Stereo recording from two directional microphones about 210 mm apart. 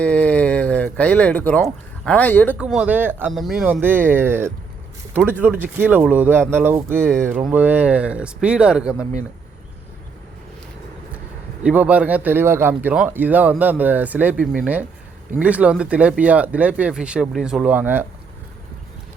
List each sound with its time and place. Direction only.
0.0 s speech: 5° left (ahead or behind)
2.6 s speech: 5° right (ahead or behind)
11.6 s speech: 5° right (ahead or behind)